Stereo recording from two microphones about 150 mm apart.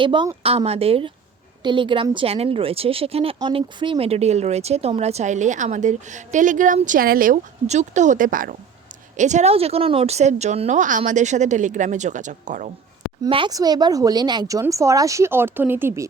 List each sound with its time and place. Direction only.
0.0 s speech: 30° right (ahead or behind); by 7.3 s 70° right (ahead or behind)
7.7 s speech: 50° right (ahead or behind)
9.1 s speech: 50° right (ahead or behind)
13.2 s speech: 30° right (ahead or behind)